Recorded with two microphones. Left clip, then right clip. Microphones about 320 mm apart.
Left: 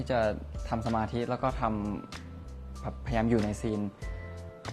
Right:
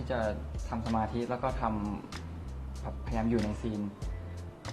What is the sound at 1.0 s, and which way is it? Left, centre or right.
Speech, left.